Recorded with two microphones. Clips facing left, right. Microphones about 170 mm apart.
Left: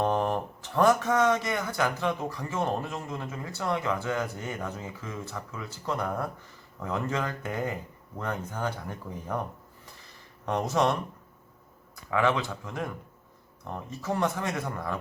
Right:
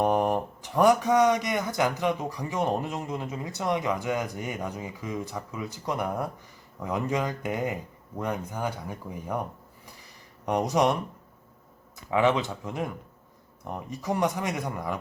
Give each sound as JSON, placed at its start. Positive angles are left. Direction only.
{"t": 0.0, "sound": "speech", "side_deg": -15}
{"t": 12.1, "sound": "speech", "side_deg": -20}